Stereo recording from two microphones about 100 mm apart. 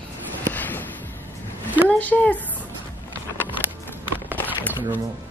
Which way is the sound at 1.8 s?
15° left (ahead or behind).